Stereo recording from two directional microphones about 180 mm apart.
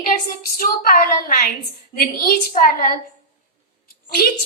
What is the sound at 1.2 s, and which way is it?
A woman's voice, 50° left (ahead or behind).